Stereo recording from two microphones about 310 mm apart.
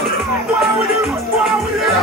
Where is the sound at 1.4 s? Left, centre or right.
Centre.